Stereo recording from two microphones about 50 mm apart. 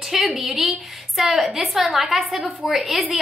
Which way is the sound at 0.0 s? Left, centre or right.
Centre.